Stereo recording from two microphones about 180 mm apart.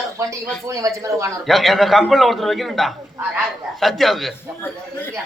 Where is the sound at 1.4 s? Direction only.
Centre (ahead or behind).